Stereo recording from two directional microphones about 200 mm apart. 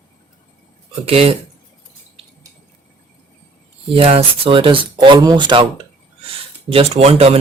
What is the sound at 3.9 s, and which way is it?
Speech, 30° right (ahead or behind).